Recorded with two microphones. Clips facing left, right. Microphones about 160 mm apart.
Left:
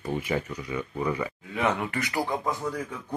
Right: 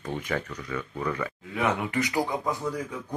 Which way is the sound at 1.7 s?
15° right (ahead or behind).